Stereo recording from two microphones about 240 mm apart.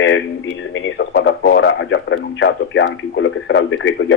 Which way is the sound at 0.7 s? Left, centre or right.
Left.